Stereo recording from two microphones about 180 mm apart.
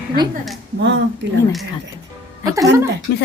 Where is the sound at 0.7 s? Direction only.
80° right.